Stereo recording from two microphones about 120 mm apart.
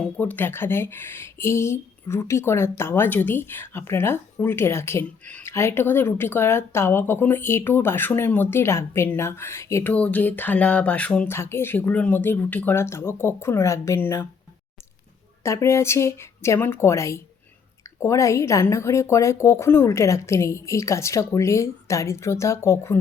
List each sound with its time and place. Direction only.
0.2 s speech: 15° left (ahead or behind)
9.9 s a sound: 10° left (ahead or behind)
11.3 s speech: 20° left (ahead or behind)
15.4 s speech: 25° left (ahead or behind)